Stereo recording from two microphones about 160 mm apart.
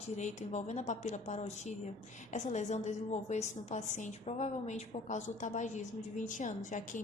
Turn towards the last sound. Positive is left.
turn(degrees=50)  # may be behind; listen again after turning